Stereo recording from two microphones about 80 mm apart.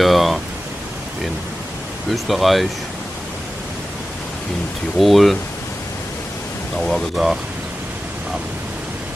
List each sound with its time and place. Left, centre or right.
0.0 s speech: centre
2.0 s speech: centre
4.9 s speech: centre
6.8 s speech: centre